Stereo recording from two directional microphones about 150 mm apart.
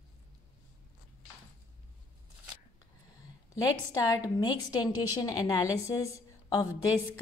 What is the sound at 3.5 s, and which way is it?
A woman's voice, 25° left (ahead or behind).